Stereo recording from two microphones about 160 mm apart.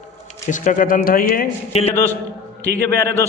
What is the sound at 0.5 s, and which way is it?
Speech, 55° left (ahead or behind).